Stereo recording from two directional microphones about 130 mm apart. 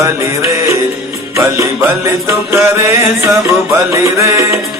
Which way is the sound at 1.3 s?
20° right (ahead or behind).